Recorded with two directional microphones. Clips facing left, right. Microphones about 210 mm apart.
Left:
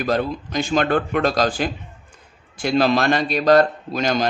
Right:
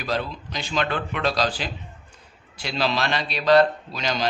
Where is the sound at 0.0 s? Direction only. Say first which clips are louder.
Left 6 dB; 50° left (ahead or behind).